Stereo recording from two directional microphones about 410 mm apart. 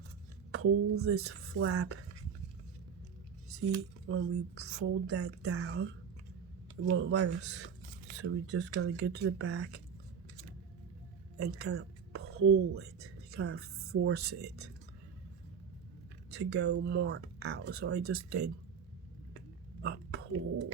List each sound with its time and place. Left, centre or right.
0.6 s speech: right
4.0 s speech: right
11.3 s speech: right
16.3 s speech: right
19.8 s a sound: right